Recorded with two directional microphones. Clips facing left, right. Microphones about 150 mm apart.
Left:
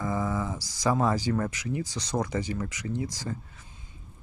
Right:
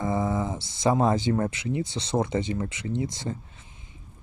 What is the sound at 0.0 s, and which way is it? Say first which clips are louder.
Speech: right 3 dB; 25° right (ahead or behind).